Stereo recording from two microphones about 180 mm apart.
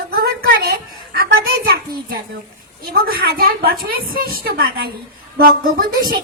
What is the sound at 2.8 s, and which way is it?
Speech, 55° right (ahead or behind).